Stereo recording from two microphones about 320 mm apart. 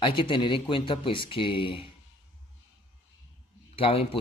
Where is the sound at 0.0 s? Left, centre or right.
Centre.